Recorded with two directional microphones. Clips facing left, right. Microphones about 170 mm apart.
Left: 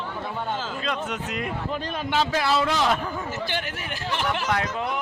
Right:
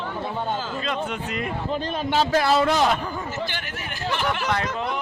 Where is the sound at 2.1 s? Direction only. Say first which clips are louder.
Right 3 dB; 40° right (ahead or behind).